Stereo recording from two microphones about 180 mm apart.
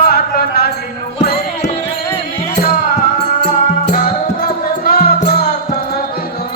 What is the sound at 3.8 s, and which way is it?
Music, 50° left (ahead or behind).